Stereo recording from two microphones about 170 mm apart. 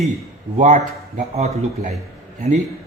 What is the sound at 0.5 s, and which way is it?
A man's voice, 45° right (ahead or behind).